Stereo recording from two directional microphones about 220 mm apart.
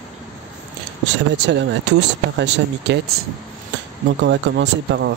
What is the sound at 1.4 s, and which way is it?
Speech, 50° right (ahead or behind).